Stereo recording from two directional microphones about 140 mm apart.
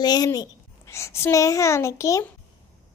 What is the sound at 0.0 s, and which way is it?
A child's voice, 30° left (ahead or behind).